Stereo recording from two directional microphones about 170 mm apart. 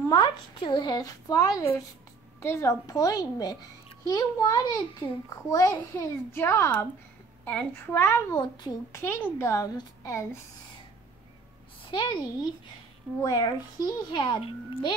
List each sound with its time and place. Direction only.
0.1 s a woman's voice: 25° left (ahead or behind)
11.8 s a woman's voice: 30° left (ahead or behind)